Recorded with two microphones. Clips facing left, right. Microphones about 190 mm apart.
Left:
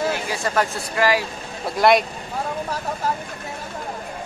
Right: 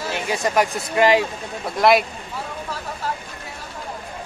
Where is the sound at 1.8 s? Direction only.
Centre (ahead or behind).